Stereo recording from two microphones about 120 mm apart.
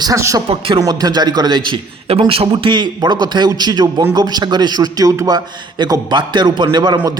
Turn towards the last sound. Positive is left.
turn(degrees=-40)  # may be behind; listen again after turning